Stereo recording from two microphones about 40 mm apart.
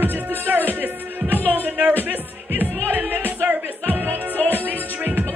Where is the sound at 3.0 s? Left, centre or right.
Right.